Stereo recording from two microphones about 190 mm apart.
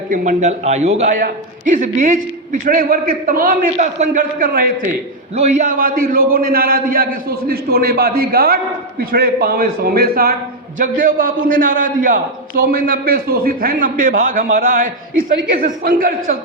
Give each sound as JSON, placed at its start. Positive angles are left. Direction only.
{"t": 0.1, "sound": "a man's voice", "side_deg": -40}
{"t": 5.4, "sound": "a man's voice", "side_deg": -35}